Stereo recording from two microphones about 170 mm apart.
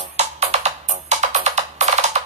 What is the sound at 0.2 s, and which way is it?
Music, 40° right (ahead or behind).